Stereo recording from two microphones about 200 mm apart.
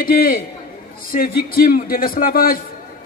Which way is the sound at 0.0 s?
45° left (ahead or behind).